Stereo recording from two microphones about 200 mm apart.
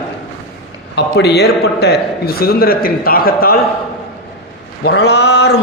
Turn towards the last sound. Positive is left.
turn(degrees=55)  # may be behind; listen again after turning